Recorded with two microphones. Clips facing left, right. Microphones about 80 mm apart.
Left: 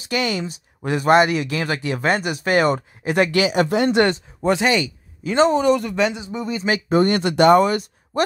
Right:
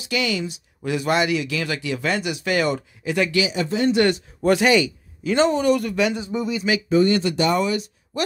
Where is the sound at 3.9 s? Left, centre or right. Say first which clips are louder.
Left 1 dB; left.